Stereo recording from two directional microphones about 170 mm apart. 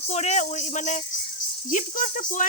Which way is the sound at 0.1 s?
40° left (ahead or behind).